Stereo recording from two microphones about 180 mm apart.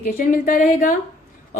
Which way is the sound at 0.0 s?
50° left (ahead or behind).